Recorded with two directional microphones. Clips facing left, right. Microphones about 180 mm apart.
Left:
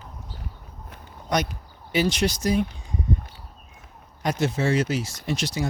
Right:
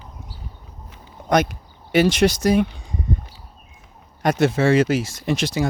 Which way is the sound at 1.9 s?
75° right (ahead or behind).